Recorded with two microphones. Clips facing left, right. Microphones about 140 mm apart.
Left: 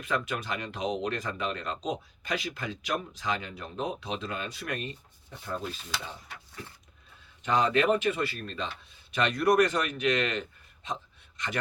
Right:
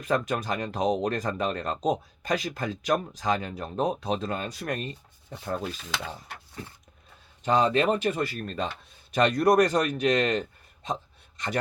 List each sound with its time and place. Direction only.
0.0 s speech: 40° right (ahead or behind)
6.3 s speech: 65° right (ahead or behind)
7.4 s speech: 35° right (ahead or behind)